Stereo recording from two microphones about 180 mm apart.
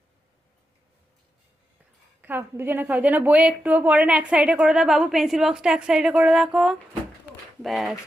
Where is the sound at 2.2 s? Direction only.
10° right (ahead or behind).